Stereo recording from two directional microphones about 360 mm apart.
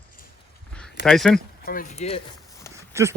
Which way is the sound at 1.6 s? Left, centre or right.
Left.